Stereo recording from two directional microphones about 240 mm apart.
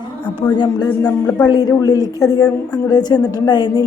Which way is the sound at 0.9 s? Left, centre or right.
Centre.